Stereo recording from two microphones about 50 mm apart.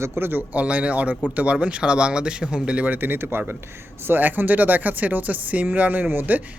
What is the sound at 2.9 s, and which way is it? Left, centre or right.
Speech, right.